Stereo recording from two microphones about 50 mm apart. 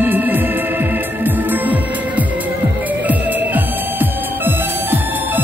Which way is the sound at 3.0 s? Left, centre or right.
Right.